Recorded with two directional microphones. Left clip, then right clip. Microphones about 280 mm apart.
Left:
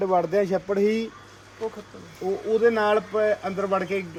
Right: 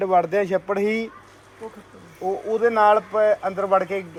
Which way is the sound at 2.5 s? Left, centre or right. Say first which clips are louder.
Left 1 dB; right.